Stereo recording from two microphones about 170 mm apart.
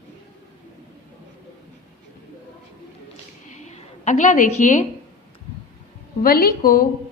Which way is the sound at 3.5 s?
45° left (ahead or behind).